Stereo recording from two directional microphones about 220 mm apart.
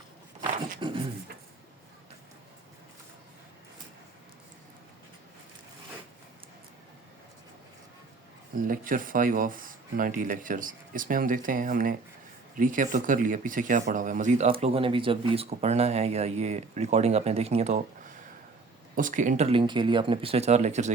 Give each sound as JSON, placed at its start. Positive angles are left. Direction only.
{"t": 0.8, "sound": "beatboxing", "side_deg": -20}
{"t": 8.6, "sound": "speech", "side_deg": -40}
{"t": 18.9, "sound": "speech", "side_deg": -35}